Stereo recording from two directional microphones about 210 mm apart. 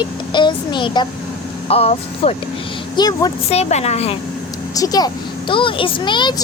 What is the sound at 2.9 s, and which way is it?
Speech, 20° left (ahead or behind).